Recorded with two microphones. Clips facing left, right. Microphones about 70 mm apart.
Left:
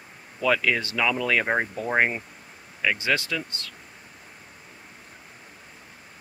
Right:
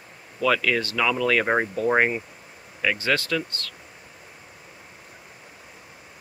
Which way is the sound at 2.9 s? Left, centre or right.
Centre.